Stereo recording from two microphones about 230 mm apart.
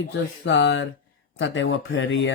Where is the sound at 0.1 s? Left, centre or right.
Left.